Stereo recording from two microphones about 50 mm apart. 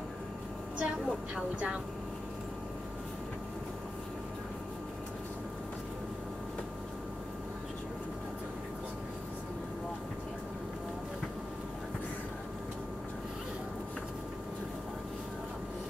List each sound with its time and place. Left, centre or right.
0.7 s a woman's voice: right